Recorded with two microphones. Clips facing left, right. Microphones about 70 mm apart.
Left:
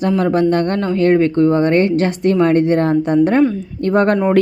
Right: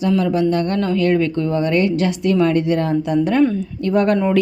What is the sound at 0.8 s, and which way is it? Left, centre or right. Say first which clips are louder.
A woman's voice: left 4 dB; left.